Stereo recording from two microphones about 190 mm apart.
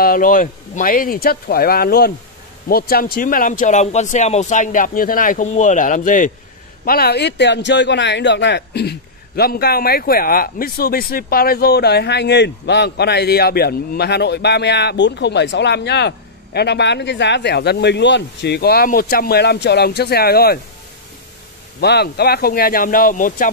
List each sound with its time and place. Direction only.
0.0 s speech: 45° left (ahead or behind)
6.8 s speech: 55° left (ahead or behind)
21.7 s speech: 60° left (ahead or behind)